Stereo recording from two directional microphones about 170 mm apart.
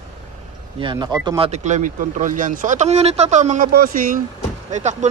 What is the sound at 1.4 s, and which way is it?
Speech, 40° right (ahead or behind).